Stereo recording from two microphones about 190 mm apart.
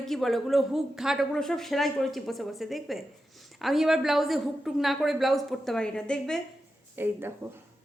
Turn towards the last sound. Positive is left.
turn(degrees=-15)  # may be behind; listen again after turning